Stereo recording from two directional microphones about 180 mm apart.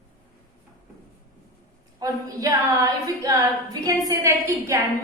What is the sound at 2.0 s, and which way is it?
A woman's voice, 20° right (ahead or behind).